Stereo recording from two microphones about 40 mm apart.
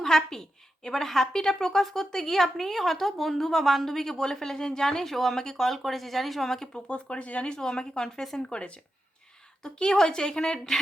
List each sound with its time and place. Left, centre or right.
0.0 s a woman's voice: centre
6.7 s speech: left
7.4 s a woman's voice: centre
8.4 s a woman's voice: left